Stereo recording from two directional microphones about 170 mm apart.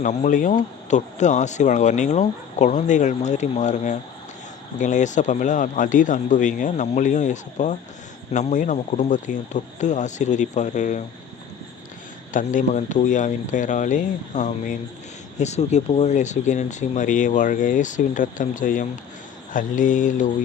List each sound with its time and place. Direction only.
0.0 s speech: 45° left (ahead or behind)
12.3 s speech: 50° left (ahead or behind)